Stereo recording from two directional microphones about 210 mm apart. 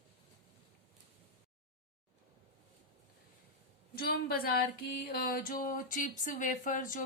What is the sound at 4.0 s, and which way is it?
A woman's voice, 45° left (ahead or behind).